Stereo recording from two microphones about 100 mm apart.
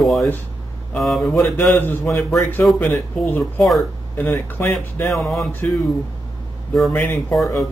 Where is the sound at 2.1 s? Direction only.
30° left (ahead or behind).